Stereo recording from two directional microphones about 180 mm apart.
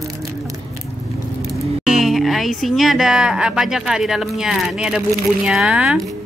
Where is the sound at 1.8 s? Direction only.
Centre (ahead or behind).